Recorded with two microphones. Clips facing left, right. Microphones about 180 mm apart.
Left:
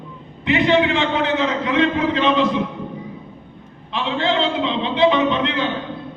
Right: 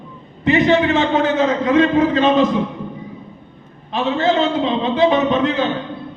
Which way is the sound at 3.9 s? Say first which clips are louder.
Right 4 dB; 40° right (ahead or behind).